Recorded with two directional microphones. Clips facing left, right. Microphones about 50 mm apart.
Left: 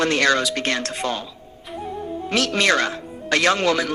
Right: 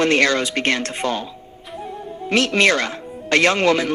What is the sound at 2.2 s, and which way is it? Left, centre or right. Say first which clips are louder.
Speech: right 4 dB; right.